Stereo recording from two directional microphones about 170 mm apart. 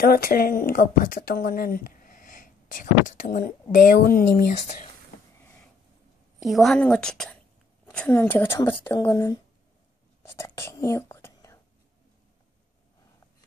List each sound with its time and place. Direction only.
0.0 s a woman's voice: 60° left (ahead or behind)
6.4 s a woman's voice: centre (ahead or behind); by 9.4 s 20° left (ahead or behind)
10.3 s whispering: 15° left (ahead or behind)